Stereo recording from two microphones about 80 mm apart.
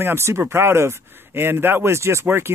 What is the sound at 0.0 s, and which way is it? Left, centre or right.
Speech, right.